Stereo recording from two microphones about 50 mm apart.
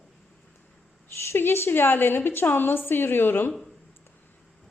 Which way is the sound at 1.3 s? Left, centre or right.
Left.